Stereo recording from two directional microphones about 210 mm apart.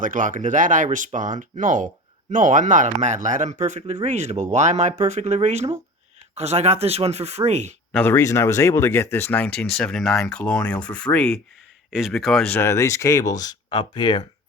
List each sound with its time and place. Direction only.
0.0 s speech: 40° right (ahead or behind)
7.9 s speech: 10° left (ahead or behind)